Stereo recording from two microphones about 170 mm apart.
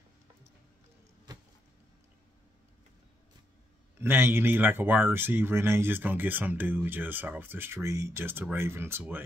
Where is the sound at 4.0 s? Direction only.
15° right (ahead or behind).